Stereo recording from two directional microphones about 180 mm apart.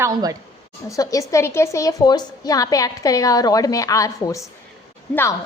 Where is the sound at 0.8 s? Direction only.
20° left (ahead or behind).